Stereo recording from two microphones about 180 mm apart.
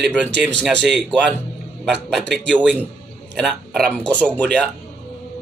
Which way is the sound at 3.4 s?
Centre (ahead or behind).